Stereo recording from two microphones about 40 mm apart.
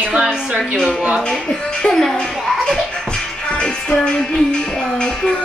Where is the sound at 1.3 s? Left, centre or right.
Centre.